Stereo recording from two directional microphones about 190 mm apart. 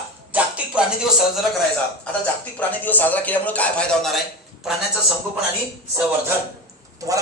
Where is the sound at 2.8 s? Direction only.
10° left (ahead or behind).